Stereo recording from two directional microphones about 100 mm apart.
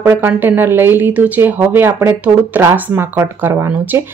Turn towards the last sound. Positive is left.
turn(degrees=-20)  # may be behind; listen again after turning